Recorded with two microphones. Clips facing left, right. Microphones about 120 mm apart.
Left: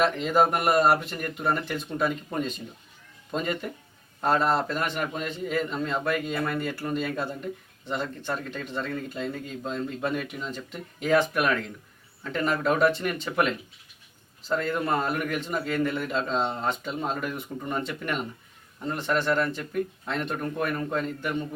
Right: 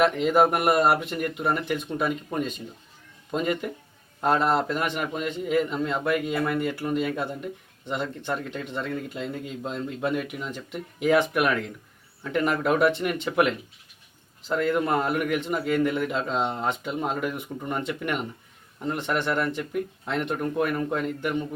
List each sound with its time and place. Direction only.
0.0 s speech: 15° right (ahead or behind)